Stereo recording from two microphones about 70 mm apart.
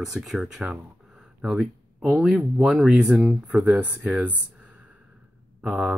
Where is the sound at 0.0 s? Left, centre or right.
Centre.